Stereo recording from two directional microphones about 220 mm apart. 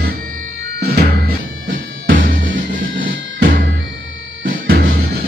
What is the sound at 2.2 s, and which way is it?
Music, 40° right (ahead or behind).